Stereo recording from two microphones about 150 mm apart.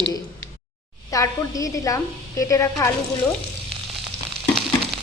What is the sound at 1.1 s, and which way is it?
A woman's voice, 20° left (ahead or behind).